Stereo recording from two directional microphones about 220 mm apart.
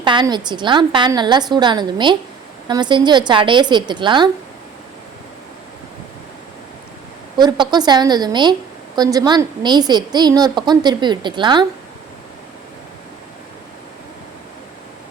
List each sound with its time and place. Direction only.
0.0 s a woman's voice: 20° right (ahead or behind)
7.3 s a woman's voice: 20° right (ahead or behind)